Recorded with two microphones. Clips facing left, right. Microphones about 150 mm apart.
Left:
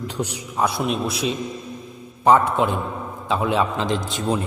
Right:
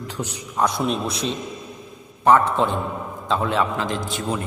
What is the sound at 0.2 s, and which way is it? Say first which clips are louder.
A man's voice: even; 10° left (ahead or behind).